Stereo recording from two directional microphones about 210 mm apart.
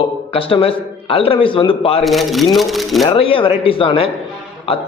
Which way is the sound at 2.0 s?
Centre (ahead or behind).